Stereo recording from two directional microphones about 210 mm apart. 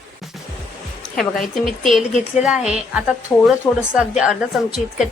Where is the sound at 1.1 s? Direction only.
Centre (ahead or behind).